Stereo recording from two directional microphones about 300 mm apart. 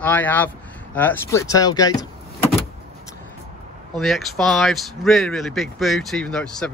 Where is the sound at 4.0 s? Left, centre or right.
Centre.